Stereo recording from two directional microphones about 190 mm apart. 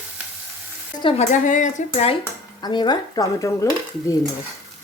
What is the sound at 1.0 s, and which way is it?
Speech, 35° left (ahead or behind).